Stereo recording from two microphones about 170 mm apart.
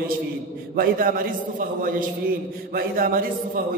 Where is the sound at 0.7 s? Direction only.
55° right (ahead or behind).